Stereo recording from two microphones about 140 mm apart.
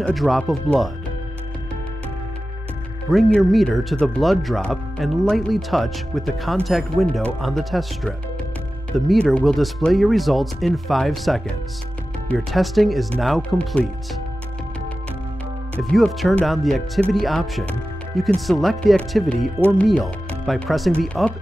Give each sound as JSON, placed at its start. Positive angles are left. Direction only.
{"t": 0.0, "sound": "speech", "side_deg": 0}
{"t": 3.1, "sound": "speech", "side_deg": 0}
{"t": 15.8, "sound": "speech", "side_deg": 0}